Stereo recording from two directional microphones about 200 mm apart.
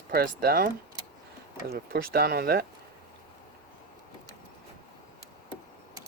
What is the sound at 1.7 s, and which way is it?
Speech, 50° right (ahead or behind).